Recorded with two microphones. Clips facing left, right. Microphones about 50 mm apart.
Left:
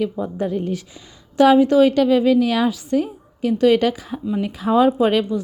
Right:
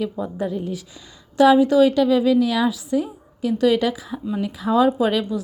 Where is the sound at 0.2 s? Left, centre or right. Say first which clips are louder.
Left 2 dB; left.